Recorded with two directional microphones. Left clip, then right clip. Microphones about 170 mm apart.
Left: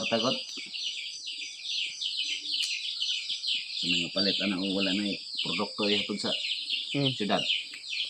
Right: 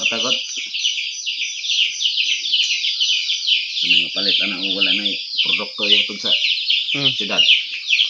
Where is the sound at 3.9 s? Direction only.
45° left (ahead or behind).